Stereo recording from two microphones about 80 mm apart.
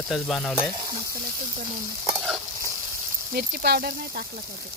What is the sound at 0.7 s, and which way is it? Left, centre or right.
Frying, right.